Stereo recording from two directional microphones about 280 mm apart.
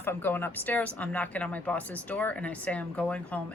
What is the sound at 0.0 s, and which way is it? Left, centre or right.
Speech, centre.